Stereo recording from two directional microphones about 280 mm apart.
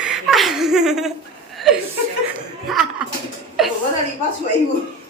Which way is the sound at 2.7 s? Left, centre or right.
Centre.